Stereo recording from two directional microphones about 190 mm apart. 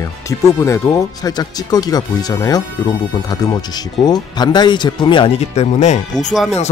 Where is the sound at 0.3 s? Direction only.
15° left (ahead or behind).